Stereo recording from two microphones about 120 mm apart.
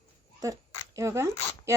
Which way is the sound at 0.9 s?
25° right (ahead or behind).